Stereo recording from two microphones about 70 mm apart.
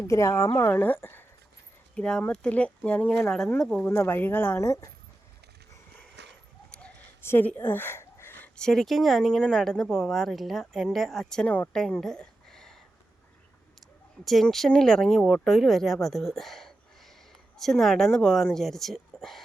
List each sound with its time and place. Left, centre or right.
0.1 s speech: left
0.7 s speech: left
2.0 s speech: centre
3.8 s speech: left
6.7 s a sound: centre
7.2 s a sound: left
8.5 s speech: centre
11.4 s speech: left
11.7 s a sound: centre
14.2 s speech: centre